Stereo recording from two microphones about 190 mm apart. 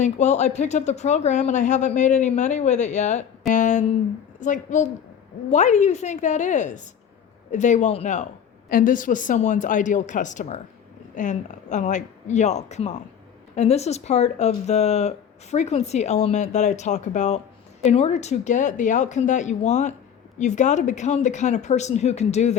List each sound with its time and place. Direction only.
0.0 s a woman's voice: 35° left (ahead or behind)